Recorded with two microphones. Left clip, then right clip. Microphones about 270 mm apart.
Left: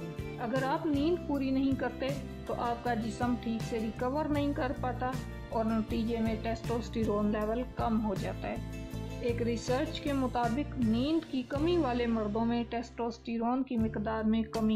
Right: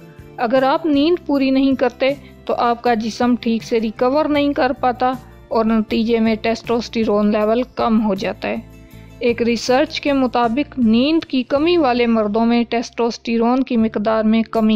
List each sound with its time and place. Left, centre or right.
0.4 s a woman's voice: right